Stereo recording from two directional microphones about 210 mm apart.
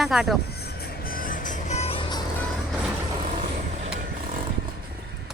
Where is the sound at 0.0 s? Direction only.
Centre (ahead or behind).